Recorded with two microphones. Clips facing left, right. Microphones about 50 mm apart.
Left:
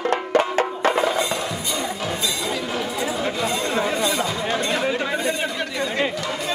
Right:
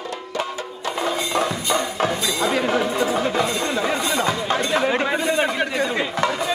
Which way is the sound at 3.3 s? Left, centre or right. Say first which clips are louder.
Right 2 dB; right.